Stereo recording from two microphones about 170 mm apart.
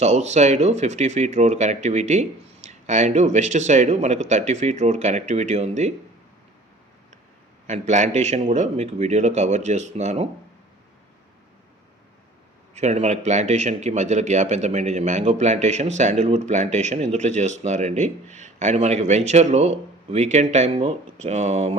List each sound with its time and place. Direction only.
0.0 s speech: 40° right (ahead or behind)
7.7 s speech: 45° right (ahead or behind)
12.7 s speech: 40° right (ahead or behind)